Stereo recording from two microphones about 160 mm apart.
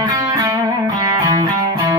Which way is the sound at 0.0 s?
25° right (ahead or behind).